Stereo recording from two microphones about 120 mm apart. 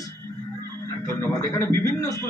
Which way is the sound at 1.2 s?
25° left (ahead or behind).